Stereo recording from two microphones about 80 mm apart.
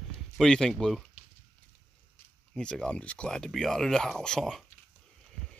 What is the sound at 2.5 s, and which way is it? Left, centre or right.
Speech, centre.